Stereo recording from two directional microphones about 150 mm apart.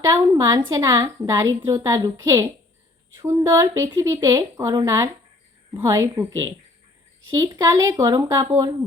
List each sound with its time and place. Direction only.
0.0 s a woman's voice: 20° right (ahead or behind)